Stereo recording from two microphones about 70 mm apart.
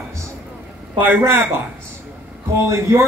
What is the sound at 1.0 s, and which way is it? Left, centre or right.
Speech, right.